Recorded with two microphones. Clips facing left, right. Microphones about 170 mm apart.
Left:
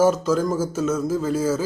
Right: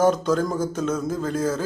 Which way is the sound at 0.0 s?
5° left (ahead or behind).